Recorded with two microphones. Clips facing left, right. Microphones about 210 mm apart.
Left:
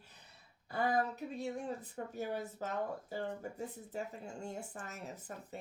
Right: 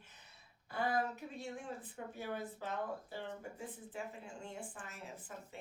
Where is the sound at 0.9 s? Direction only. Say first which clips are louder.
Left 3 dB; 40° left (ahead or behind).